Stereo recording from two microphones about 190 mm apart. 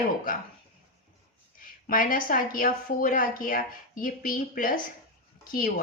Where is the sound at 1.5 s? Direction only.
45° left (ahead or behind).